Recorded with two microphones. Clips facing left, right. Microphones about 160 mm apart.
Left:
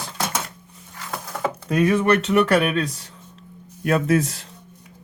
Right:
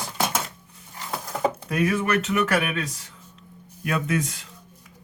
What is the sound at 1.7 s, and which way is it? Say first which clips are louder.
Speech: left 7 dB; 30° left (ahead or behind).